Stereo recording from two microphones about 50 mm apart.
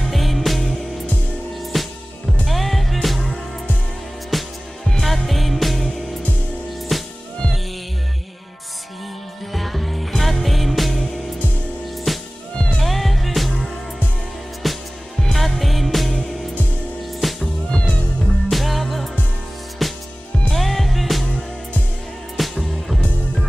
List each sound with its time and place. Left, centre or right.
0.0 s music: centre
4.3 s music: centre
9.5 s music: centre
12.1 s music: centre
14.6 s music: centre
17.6 s music: centre
18.2 s music: centre
22.4 s music: centre